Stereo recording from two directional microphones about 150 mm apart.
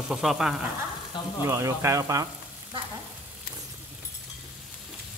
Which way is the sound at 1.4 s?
20° right (ahead or behind).